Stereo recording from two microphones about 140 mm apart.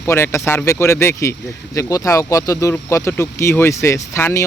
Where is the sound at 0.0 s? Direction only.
20° left (ahead or behind).